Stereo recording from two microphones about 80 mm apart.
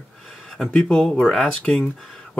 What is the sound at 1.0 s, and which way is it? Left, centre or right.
Speech, centre.